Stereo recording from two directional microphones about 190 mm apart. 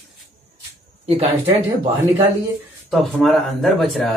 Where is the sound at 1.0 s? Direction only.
35° right (ahead or behind).